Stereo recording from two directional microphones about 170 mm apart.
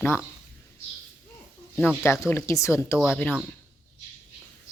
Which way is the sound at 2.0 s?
15° left (ahead or behind).